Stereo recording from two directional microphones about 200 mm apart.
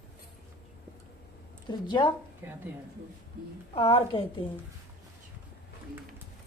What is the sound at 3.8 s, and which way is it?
Speech, 30° left (ahead or behind).